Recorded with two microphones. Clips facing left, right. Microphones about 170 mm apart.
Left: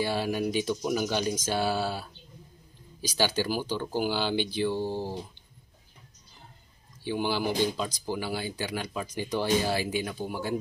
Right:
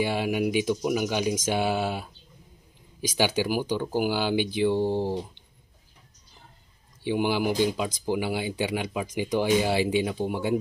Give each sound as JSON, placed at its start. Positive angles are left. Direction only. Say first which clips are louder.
{"t": 0.0, "sound": "speech", "louder": "right 3 dB", "side_deg": -15}
{"t": 3.2, "sound": "speech", "louder": "right 3 dB", "side_deg": -15}
{"t": 4.6, "sound": "speech", "louder": "right 6 dB", "side_deg": -25}
{"t": 7.1, "sound": "speech", "louder": "right 4 dB", "side_deg": -15}